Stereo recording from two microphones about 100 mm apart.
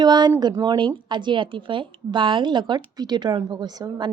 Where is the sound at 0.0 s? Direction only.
45° right (ahead or behind).